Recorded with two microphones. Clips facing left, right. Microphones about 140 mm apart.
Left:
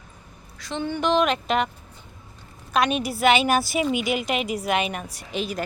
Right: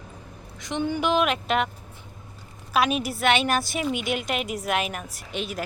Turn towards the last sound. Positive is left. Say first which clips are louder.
# left 3 dB
turn(degrees=0)  # may be behind; listen again after turning